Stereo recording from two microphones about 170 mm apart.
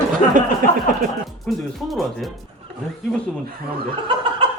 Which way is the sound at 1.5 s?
Centre (ahead or behind).